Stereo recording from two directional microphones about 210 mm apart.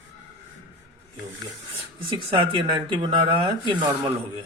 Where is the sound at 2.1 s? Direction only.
20° right (ahead or behind).